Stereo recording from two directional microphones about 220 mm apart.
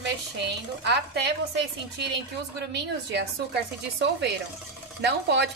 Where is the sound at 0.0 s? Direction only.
50° right (ahead or behind).